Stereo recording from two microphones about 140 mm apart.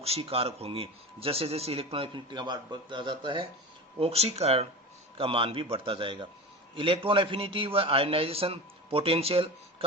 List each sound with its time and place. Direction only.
0.0 s a man's voice: 45° right (ahead or behind)
4.0 s a man's voice: 50° right (ahead or behind)